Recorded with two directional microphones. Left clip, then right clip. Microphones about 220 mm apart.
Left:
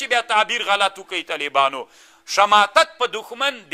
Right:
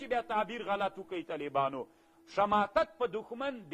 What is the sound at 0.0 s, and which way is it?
A man's voice, 10° left (ahead or behind).